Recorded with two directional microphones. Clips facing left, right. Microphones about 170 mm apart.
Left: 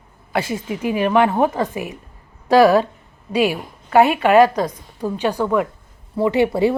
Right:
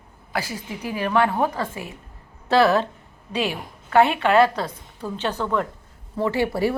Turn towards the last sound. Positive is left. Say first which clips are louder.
# left 5 dB
turn(degrees=20)  # may be behind; listen again after turning